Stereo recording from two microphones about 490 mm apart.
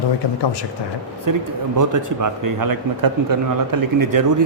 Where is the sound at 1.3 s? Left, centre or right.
Right.